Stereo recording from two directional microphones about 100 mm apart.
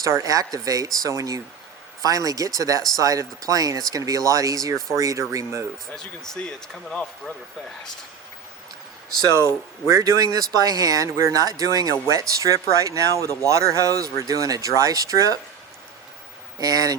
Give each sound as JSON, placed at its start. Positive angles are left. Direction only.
{"t": 0.0, "sound": "speech", "side_deg": -35}
{"t": 5.9, "sound": "speech", "side_deg": 5}
{"t": 9.3, "sound": "a man's voice", "side_deg": -30}
{"t": 16.6, "sound": "speech", "side_deg": -35}